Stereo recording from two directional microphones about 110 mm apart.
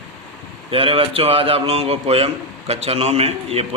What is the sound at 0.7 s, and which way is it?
A man's voice, 55° right (ahead or behind).